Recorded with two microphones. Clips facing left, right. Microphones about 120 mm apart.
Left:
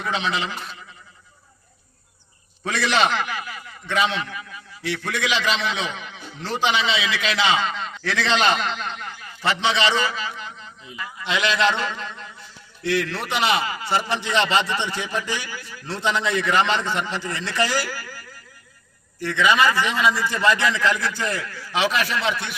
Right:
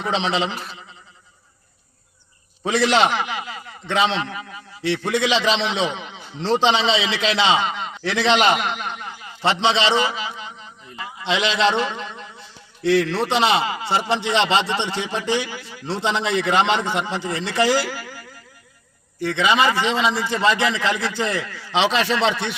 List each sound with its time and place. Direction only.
0.0 s a man's voice: 25° right (ahead or behind)
2.6 s a man's voice: 20° right (ahead or behind)
12.8 s a man's voice: 30° right (ahead or behind)